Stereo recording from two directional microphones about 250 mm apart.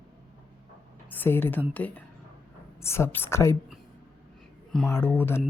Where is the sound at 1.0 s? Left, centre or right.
Centre.